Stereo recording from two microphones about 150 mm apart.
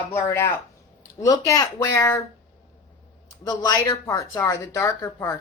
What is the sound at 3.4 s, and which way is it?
Speech, 25° left (ahead or behind).